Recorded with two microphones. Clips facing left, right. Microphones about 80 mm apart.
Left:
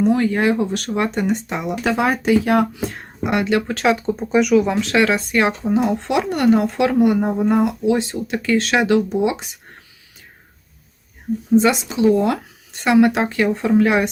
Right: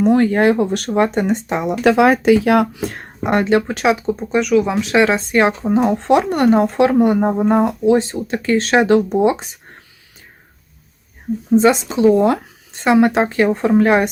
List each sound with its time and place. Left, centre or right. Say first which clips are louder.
0.0 s speech: right 4 dB; right
0.9 s speech: right 4 dB; right
1.8 s speech: right 7 dB; right
3.2 s speech: right 4 dB; right
3.7 s speech: right 1 dB; centre
4.7 s speech: right 1 dB; centre
4.9 s speech: right 4 dB; right
11.5 s speech: right 3 dB; right